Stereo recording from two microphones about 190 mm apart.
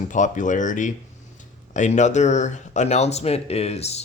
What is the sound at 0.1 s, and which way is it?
Speech, 40° left (ahead or behind).